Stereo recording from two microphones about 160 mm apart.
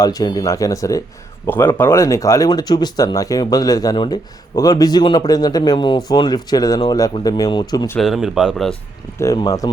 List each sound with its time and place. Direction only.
0.0 s speech: 25° left (ahead or behind)
7.9 s speech: centre (ahead or behind)
9.2 s speech: 20° left (ahead or behind)